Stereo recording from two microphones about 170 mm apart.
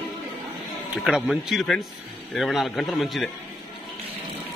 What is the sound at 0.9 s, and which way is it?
A man's voice, centre (ahead or behind).